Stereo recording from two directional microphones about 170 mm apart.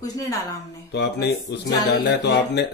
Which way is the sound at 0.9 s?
75° left (ahead or behind).